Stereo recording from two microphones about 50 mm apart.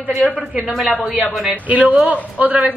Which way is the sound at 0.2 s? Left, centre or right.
Centre.